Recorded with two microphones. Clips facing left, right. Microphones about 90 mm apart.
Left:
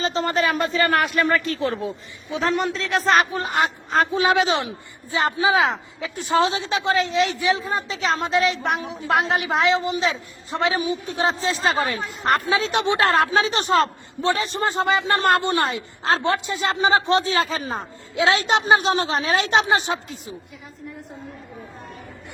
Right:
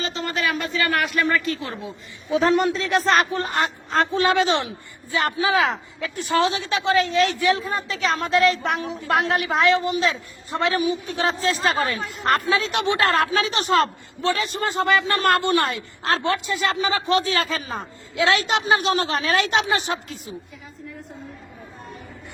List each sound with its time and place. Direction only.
0.0 s a man's voice: 35° left (ahead or behind)
2.3 s a woman's voice: centre (ahead or behind); by 10.8 s 15° left (ahead or behind)
10.8 s speech: 25° left (ahead or behind)
14.8 s speech: 20° left (ahead or behind)